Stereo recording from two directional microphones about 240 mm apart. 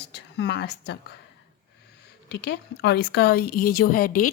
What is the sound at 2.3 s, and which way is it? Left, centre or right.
Speech, left.